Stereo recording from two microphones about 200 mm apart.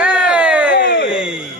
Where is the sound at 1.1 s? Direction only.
5° right (ahead or behind).